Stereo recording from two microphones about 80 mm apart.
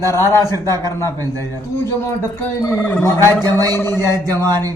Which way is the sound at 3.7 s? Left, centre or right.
Left.